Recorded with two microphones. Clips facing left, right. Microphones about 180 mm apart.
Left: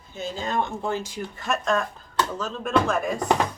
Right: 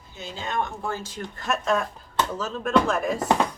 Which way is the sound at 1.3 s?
Centre (ahead or behind).